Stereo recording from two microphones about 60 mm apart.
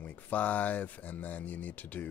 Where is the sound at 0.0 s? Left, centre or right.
Left.